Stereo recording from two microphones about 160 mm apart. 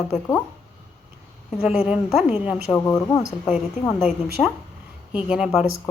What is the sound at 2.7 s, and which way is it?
Speech, 20° left (ahead or behind).